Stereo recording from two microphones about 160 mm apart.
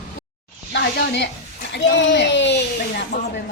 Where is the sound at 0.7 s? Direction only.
90° left.